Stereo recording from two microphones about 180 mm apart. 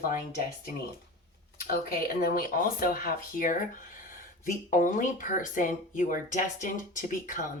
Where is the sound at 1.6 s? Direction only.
55° left (ahead or behind).